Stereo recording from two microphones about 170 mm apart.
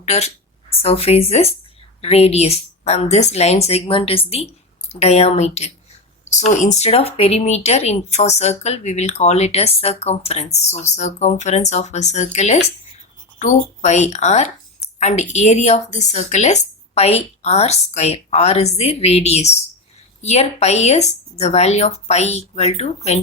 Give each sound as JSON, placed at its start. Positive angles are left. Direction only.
{"t": 0.0, "sound": "a woman's voice", "side_deg": 40}